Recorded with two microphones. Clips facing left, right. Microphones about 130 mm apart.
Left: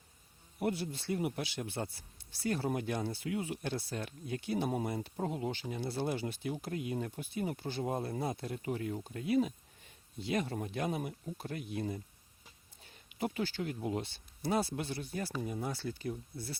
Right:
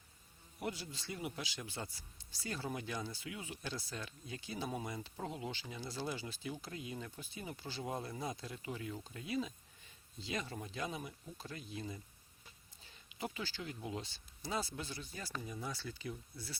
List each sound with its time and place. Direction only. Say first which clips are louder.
0.6 s speech: left 8 dB; 55° left (ahead or behind)
12.8 s a sound: left 7 dB; 55° left (ahead or behind)
13.8 s speech: left 7 dB; 55° left (ahead or behind)